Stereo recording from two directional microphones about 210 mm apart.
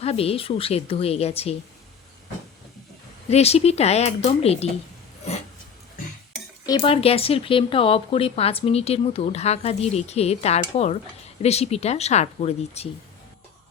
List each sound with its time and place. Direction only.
0.0 s speech: 30° left (ahead or behind)
3.2 s speech: 30° left (ahead or behind)
6.7 s speech: 25° left (ahead or behind)